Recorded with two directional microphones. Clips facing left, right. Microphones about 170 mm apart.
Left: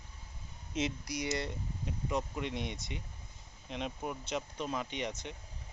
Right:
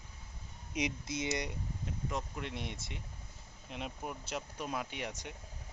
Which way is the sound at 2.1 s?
Centre (ahead or behind).